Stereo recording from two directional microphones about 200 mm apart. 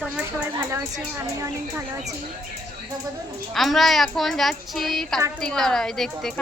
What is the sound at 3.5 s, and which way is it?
A woman's voice, centre (ahead or behind).